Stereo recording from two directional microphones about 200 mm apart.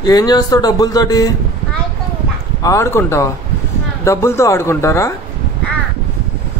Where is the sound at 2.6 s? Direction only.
15° left (ahead or behind).